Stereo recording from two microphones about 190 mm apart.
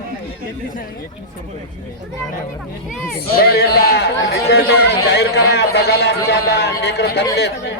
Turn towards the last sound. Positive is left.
turn(degrees=60)  # may be behind; listen again after turning